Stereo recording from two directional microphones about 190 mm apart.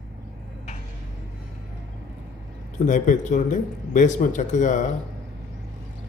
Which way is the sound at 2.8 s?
40° left (ahead or behind).